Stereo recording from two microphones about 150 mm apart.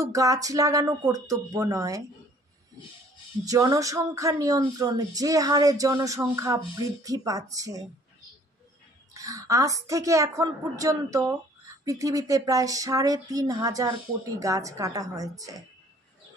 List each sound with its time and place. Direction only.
0.0 s speech: 20° right (ahead or behind)
3.4 s speech: 25° right (ahead or behind)
9.1 s speech: 20° right (ahead or behind)